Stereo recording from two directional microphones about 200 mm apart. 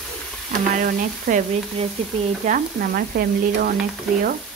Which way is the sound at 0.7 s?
40° right (ahead or behind).